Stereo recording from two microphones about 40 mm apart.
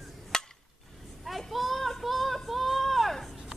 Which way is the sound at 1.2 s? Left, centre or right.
Centre.